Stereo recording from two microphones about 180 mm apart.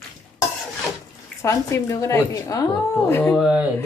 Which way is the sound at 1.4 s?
15° left (ahead or behind).